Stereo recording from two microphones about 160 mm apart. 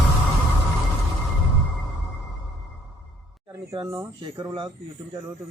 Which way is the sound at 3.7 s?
20° right (ahead or behind).